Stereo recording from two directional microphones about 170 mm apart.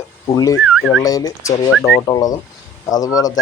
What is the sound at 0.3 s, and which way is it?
Speech, 20° left (ahead or behind).